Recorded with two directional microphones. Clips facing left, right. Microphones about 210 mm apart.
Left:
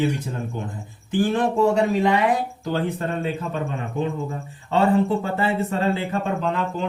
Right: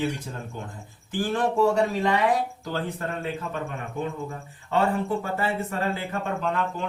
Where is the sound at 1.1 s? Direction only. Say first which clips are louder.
Left 4 dB; 20° left (ahead or behind).